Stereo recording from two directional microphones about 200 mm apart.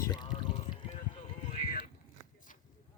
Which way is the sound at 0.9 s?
35° left (ahead or behind).